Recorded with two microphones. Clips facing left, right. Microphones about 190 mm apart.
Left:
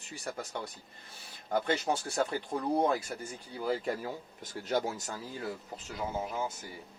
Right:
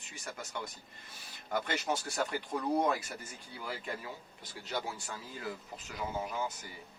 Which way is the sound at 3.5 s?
40° left (ahead or behind).